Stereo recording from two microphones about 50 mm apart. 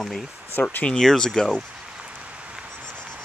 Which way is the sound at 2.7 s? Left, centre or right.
Right.